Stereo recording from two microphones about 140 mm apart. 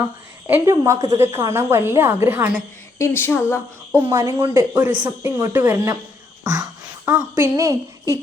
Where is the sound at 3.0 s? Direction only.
15° left (ahead or behind).